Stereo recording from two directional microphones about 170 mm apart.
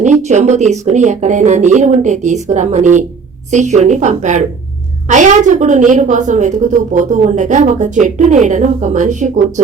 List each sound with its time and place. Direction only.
0.0 s speech: 45° right (ahead or behind)